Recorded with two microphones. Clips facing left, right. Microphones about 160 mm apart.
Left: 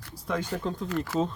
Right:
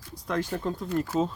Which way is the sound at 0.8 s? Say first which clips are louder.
Right 3 dB; 90° left.